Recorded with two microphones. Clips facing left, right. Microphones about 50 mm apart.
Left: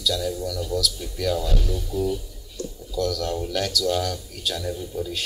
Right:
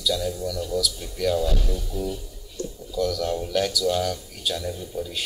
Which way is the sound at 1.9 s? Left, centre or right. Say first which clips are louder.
Left 6 dB; right.